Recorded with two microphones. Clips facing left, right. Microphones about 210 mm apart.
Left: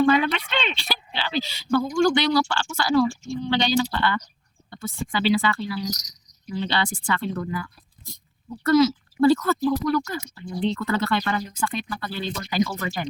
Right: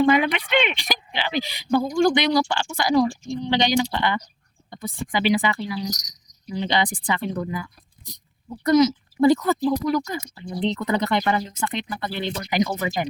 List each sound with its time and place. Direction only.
0.0 s speech: 15° right (ahead or behind)
4.7 s a sound: 15° right (ahead or behind)
5.1 s speech: 15° right (ahead or behind)